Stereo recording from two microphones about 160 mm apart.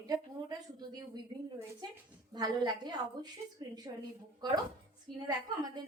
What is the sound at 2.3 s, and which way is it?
A woman's voice, 25° right (ahead or behind).